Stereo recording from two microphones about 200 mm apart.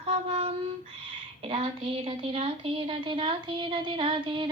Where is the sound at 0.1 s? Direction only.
30° right (ahead or behind).